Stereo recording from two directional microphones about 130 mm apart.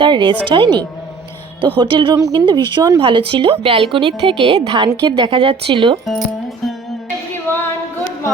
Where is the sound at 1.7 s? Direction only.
40° right (ahead or behind).